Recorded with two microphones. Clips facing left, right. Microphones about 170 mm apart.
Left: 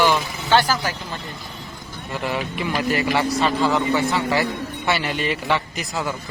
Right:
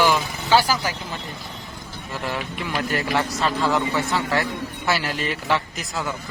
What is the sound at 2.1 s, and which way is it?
A man's voice, centre (ahead or behind).